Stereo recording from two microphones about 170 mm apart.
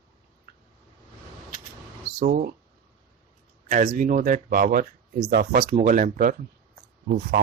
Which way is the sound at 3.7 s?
50° right (ahead or behind).